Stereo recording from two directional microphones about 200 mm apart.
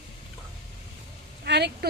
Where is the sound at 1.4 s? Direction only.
55° right (ahead or behind).